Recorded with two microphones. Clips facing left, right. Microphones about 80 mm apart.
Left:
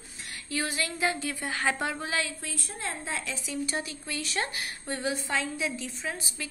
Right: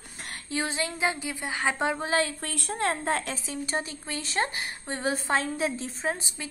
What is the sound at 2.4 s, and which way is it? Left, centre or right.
A woman's voice, right.